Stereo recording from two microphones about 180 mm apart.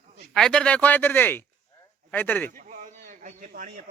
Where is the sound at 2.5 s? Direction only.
45° right (ahead or behind).